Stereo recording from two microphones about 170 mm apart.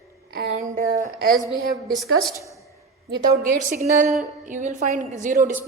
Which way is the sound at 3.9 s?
50° right (ahead or behind).